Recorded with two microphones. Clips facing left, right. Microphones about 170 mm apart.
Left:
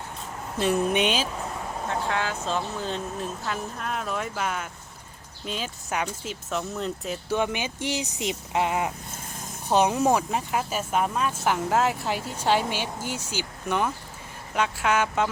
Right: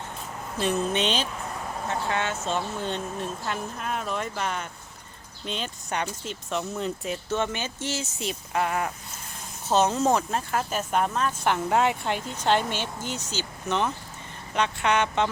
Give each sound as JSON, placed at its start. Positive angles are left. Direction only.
{"t": 0.6, "sound": "speech", "side_deg": 10}
{"t": 7.3, "sound": "speech", "side_deg": 10}